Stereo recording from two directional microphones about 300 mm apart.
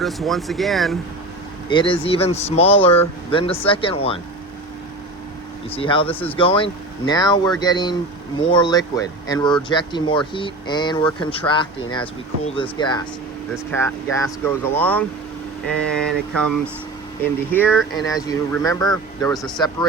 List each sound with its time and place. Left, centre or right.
0.0 s speech: centre
1.7 s speech: centre
5.7 s speech: centre
17.5 s speech: centre